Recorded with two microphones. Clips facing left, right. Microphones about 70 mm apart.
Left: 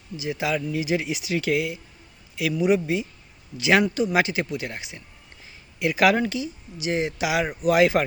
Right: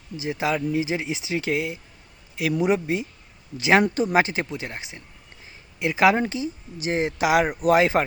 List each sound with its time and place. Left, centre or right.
0.2 s speech: right
3.8 s speech: right
4.1 s speech: right
6.7 s speech: right